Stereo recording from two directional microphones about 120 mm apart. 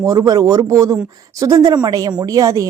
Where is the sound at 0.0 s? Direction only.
30° right (ahead or behind).